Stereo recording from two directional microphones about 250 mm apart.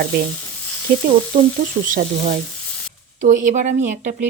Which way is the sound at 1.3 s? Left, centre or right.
Right.